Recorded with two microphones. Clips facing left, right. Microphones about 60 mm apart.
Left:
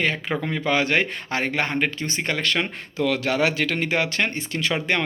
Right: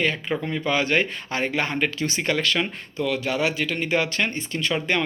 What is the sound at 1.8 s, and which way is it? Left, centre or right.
Speech, left.